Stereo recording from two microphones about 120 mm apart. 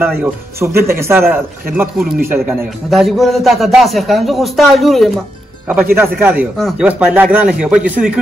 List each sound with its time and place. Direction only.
0.0 s a man's voice: 20° right (ahead or behind)
2.9 s a man's voice: centre (ahead or behind)
5.7 s a man's voice: 15° right (ahead or behind)